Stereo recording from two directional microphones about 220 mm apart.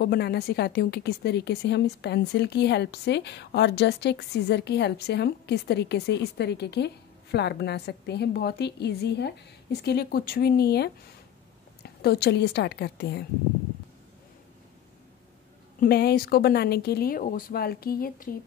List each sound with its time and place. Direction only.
0.0 s speech: 45° left (ahead or behind)
15.8 s speech: 45° left (ahead or behind)